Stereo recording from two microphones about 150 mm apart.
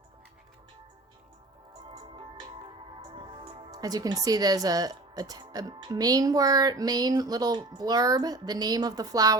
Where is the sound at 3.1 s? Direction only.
35° right (ahead or behind).